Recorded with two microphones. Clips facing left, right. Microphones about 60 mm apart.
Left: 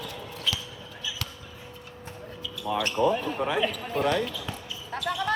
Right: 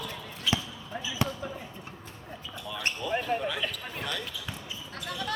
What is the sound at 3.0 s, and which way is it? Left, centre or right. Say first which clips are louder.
Speech: left 12 dB; left.